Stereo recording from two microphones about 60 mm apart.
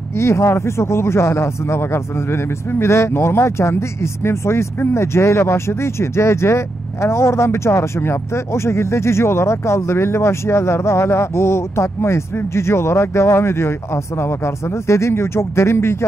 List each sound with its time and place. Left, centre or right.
0.2 s speech: left